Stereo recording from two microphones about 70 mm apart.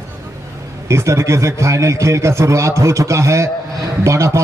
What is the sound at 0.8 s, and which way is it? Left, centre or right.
A man's voice, right.